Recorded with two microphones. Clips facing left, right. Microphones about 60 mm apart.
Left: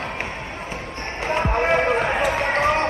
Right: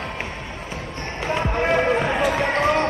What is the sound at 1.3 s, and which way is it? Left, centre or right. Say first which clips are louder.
Music: left 1 dB; left.